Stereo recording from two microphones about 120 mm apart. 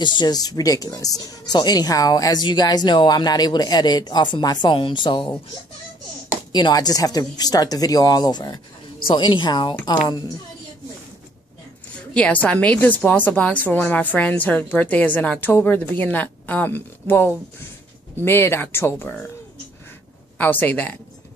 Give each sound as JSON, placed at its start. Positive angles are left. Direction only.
{"t": 0.0, "sound": "speech", "side_deg": 40}
{"t": 6.5, "sound": "speech", "side_deg": 35}
{"t": 12.1, "sound": "a woman's voice", "side_deg": 10}
{"t": 20.3, "sound": "a woman's voice", "side_deg": 15}